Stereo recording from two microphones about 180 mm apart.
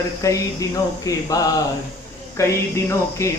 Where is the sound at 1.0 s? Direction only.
20° left (ahead or behind).